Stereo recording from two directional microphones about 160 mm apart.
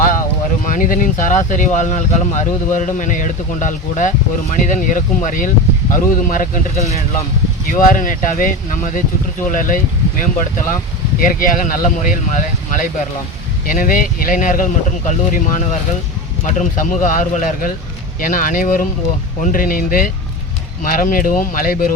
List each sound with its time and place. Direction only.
0.6 s speech: 55° left (ahead or behind)
7.7 s speech: 60° left (ahead or behind)